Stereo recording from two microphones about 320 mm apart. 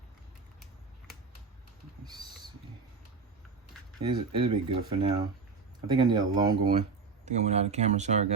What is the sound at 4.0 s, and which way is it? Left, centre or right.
Speech, centre.